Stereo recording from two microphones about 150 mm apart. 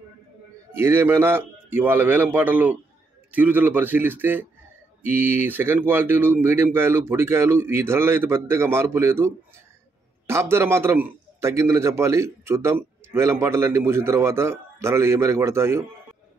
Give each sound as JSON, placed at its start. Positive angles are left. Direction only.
{"t": 0.7, "sound": "a man's voice", "side_deg": -15}